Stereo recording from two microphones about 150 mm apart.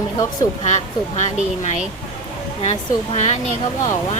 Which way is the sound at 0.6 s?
50° left (ahead or behind).